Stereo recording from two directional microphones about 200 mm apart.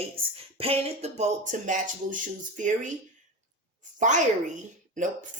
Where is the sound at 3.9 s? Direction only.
40° right (ahead or behind).